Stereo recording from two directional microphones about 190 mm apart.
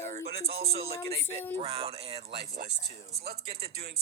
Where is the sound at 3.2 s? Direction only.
55° right (ahead or behind).